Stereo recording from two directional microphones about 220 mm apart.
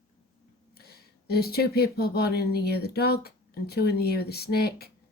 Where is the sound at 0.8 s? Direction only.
45° left (ahead or behind).